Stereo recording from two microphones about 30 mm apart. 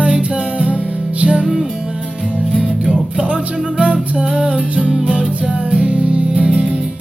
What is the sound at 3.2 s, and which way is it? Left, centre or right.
Music, right.